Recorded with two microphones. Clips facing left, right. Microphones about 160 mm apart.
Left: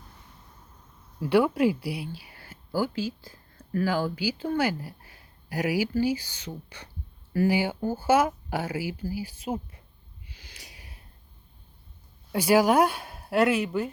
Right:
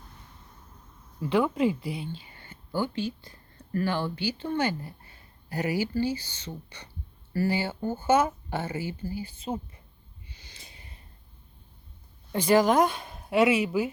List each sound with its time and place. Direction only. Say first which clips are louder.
1.2 s speech: left 3 dB; 5° left (ahead or behind)
2.2 s whispering: left 1 dB; 90° left
2.7 s speech: left 1 dB; 5° left (ahead or behind)
10.3 s a sound: left 2 dB; 90° left
12.3 s speech: left 1 dB; 10° left (ahead or behind)